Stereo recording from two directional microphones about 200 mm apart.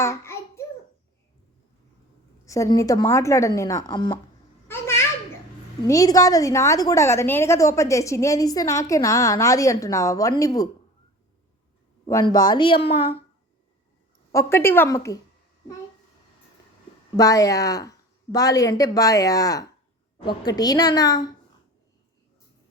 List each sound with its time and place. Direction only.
0.0 s child singing: 15° left (ahead or behind)
2.5 s a woman's voice: 15° left (ahead or behind)
4.7 s children playing: 15° left (ahead or behind)
5.9 s a woman's voice: 15° left (ahead or behind)
12.0 s a woman's voice: 15° left (ahead or behind)
14.3 s a woman's voice: 10° left (ahead or behind)
17.2 s a woman's voice: 15° left (ahead or behind)